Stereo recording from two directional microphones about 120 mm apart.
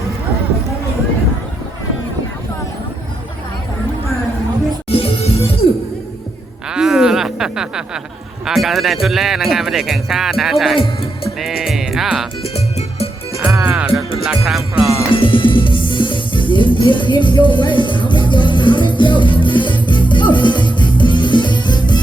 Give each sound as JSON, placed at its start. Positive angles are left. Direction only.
{"t": 4.9, "sound": "music", "side_deg": 50}
{"t": 6.7, "sound": "a sound", "side_deg": -5}
{"t": 8.4, "sound": "speech", "side_deg": 0}
{"t": 10.8, "sound": "speech", "side_deg": 55}
{"t": 11.3, "sound": "speech", "side_deg": -5}
{"t": 12.4, "sound": "music", "side_deg": 60}
{"t": 13.5, "sound": "music", "side_deg": -10}
{"t": 14.3, "sound": "speech", "side_deg": -5}
{"t": 15.1, "sound": "music", "side_deg": 45}